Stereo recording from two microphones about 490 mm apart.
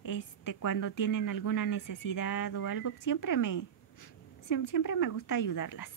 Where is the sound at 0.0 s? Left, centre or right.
Left.